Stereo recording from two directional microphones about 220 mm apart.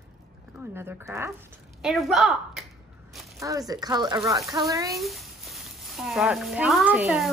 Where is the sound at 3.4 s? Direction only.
15° right (ahead or behind).